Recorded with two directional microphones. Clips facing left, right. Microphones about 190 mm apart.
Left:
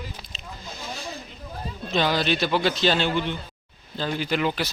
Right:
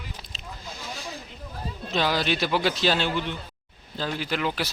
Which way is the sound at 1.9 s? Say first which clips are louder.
Left 2 dB; 5° right (ahead or behind).